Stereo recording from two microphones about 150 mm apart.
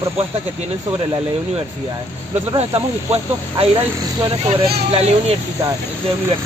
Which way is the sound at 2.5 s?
40° right (ahead or behind).